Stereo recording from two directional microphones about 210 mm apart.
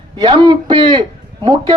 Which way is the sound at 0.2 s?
25° right (ahead or behind).